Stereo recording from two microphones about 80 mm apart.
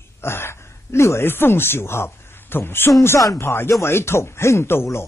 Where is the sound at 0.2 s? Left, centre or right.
Left.